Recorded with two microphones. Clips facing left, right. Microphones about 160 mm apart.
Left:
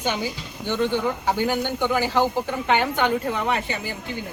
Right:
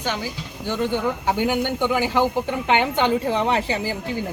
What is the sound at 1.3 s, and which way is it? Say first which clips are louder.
A woman's voice: right 3 dB; 15° right (ahead or behind).